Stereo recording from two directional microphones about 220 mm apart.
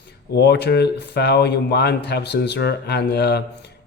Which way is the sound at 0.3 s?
50° left (ahead or behind).